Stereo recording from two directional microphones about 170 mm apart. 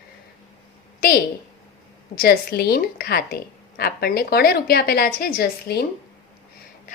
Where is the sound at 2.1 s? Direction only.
65° left (ahead or behind).